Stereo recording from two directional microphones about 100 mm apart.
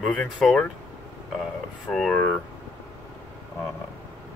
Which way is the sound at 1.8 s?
5° left (ahead or behind).